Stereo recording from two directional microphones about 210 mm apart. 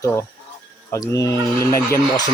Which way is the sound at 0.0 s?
15° left (ahead or behind).